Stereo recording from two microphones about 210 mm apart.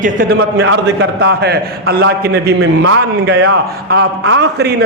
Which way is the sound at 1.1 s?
50° right (ahead or behind).